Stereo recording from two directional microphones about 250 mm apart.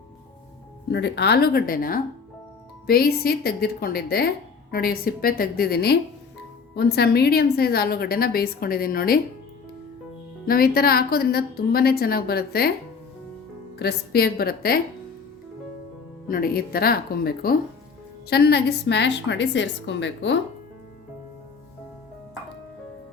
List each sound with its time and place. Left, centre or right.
0.9 s a woman's voice: left
10.4 s a woman's voice: left
13.7 s a woman's voice: left
16.3 s a woman's voice: left